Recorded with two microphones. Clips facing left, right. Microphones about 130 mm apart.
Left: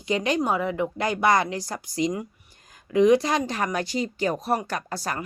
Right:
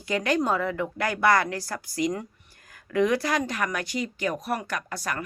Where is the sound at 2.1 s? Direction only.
15° left (ahead or behind).